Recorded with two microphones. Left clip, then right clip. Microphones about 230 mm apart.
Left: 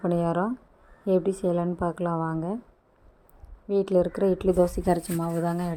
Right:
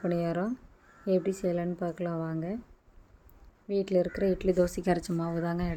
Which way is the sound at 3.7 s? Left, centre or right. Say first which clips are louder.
Left 5 dB; centre.